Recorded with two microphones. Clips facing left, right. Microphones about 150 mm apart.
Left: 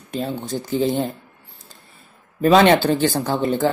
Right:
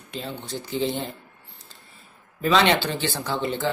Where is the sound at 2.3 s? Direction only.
45° left (ahead or behind).